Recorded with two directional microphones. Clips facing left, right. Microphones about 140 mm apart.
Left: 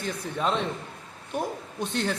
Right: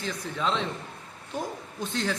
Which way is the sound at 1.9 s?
60° left (ahead or behind).